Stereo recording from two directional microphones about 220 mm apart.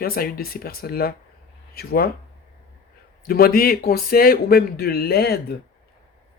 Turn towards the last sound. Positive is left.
turn(degrees=45)  # may be behind; listen again after turning